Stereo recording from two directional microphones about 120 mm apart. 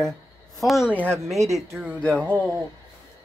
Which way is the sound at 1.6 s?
15° right (ahead or behind).